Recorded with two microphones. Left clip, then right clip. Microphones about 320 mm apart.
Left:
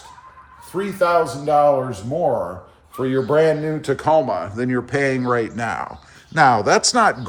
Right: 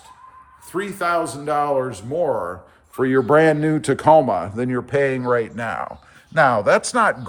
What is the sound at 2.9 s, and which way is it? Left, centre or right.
Speech, right.